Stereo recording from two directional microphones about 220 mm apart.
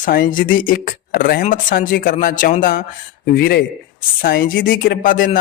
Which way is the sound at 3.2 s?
45° left (ahead or behind).